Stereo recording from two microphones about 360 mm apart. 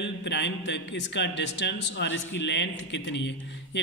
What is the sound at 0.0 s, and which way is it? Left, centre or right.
A man's voice, left.